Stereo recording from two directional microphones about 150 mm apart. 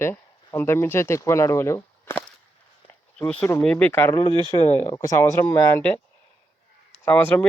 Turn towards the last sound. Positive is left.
turn(degrees=10)  # may be behind; listen again after turning